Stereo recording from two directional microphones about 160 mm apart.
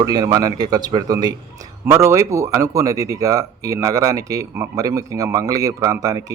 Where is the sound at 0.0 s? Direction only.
25° right (ahead or behind).